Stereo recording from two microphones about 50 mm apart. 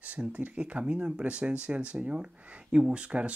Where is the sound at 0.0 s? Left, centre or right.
Right.